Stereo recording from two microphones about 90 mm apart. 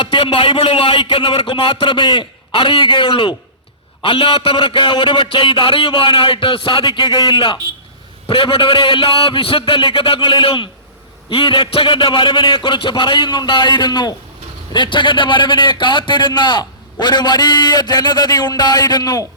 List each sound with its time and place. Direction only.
0.0 s a man's voice: 65° left (ahead or behind)
4.0 s a man's voice: 75° left (ahead or behind); by 7.6 s 60° left (ahead or behind)
8.3 s a man's voice: 70° left (ahead or behind); by 19.2 s 45° left (ahead or behind)